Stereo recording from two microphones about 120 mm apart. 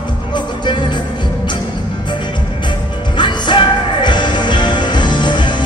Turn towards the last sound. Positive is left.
turn(degrees=40)  # may be behind; listen again after turning